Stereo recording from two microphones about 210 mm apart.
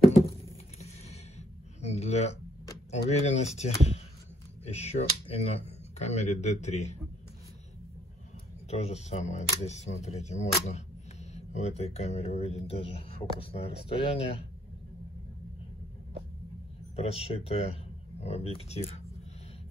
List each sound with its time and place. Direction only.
1.8 s a sound: 30° left (ahead or behind)
2.9 s speech: 35° left (ahead or behind)
8.6 s speech: 30° left (ahead or behind)
16.9 s speech: 30° left (ahead or behind)